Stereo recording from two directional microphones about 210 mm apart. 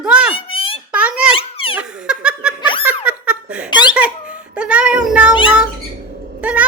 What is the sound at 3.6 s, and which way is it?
Giggle, 20° left (ahead or behind).